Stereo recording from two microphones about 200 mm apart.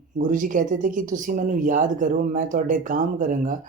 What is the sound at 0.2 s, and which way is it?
Speech, 40° right (ahead or behind).